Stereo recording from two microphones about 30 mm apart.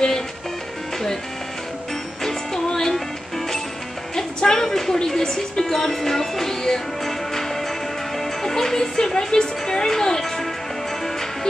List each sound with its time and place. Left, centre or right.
2.2 s music: centre
4.1 s music: left
4.8 s speech: left
8.2 s music: centre